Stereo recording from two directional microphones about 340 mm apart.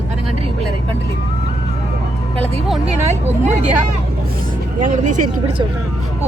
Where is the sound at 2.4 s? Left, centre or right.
Centre.